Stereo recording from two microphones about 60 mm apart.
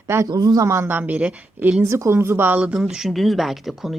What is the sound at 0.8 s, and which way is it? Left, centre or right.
Speech, right.